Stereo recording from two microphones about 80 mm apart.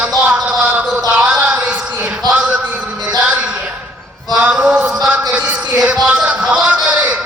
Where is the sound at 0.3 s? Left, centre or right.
Centre.